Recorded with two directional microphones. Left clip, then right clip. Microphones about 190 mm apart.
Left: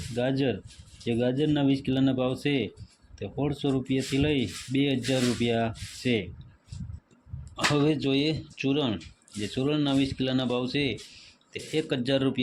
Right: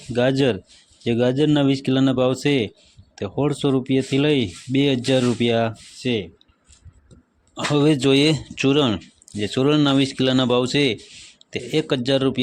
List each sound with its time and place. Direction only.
0.2 s speech: 35° right (ahead or behind)
6.0 s speech: 15° right (ahead or behind)
7.5 s speech: 25° right (ahead or behind)